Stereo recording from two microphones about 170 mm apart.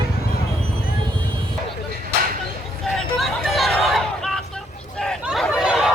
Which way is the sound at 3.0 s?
Centre (ahead or behind).